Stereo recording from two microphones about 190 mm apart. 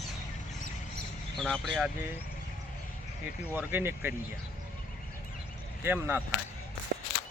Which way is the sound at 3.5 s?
10° right (ahead or behind).